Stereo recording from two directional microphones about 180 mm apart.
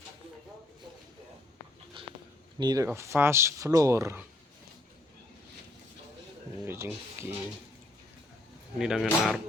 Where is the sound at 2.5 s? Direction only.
20° right (ahead or behind).